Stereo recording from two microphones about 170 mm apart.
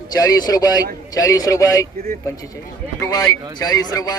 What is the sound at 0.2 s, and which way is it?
A man's voice, 20° left (ahead or behind).